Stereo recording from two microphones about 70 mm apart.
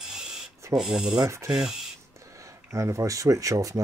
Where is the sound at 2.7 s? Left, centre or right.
Right.